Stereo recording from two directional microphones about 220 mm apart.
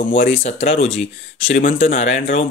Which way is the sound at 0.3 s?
30° left (ahead or behind).